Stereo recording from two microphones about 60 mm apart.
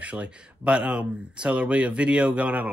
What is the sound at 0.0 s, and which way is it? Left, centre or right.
Speech, right.